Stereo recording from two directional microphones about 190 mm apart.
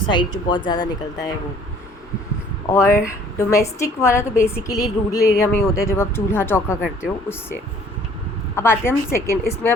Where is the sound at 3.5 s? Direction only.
15° left (ahead or behind).